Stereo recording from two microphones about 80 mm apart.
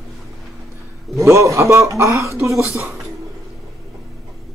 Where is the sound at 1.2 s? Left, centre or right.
Right.